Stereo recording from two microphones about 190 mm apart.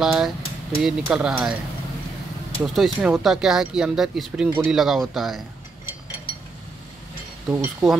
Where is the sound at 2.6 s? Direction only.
Centre (ahead or behind).